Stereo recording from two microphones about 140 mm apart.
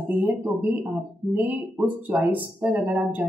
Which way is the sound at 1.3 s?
10° right (ahead or behind).